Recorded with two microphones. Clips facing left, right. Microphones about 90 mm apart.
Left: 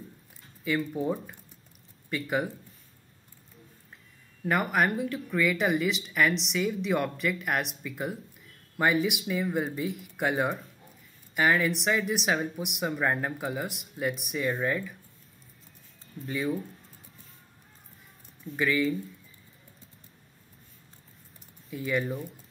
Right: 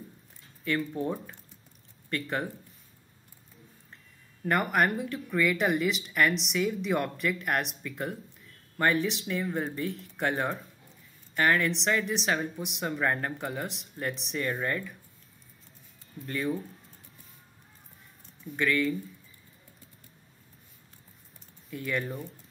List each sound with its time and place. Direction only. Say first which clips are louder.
0.7 s speech: left 2 dB; 5° left (ahead or behind)
4.5 s speech: even; centre (ahead or behind)
16.3 s speech: left 1 dB; 5° left (ahead or behind)
18.6 s speech: left 1 dB; 5° left (ahead or behind)
21.6 s speech: left 3 dB; 5° left (ahead or behind)